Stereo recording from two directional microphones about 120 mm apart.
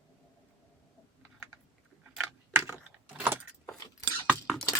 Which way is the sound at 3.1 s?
15° right (ahead or behind).